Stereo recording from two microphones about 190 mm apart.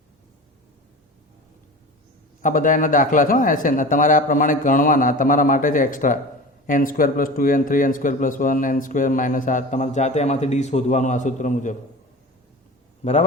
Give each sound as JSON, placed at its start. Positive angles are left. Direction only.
{"t": 2.4, "sound": "a man's voice", "side_deg": 45}